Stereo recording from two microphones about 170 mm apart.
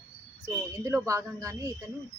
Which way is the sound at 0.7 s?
20° right (ahead or behind).